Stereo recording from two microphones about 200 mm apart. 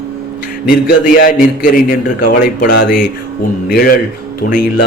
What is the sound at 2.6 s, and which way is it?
Speech, 50° left (ahead or behind).